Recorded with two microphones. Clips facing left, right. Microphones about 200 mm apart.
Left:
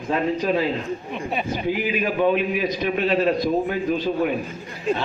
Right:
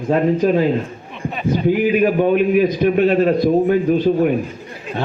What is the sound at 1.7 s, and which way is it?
A man's voice, 50° right (ahead or behind).